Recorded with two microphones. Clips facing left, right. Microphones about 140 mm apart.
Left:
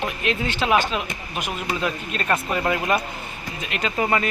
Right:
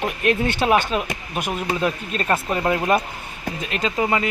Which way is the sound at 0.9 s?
40° right (ahead or behind).